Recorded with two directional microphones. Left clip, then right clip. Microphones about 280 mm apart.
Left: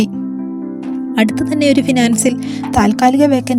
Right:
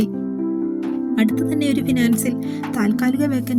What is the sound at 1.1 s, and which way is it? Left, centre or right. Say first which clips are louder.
Speech: left 6 dB; right.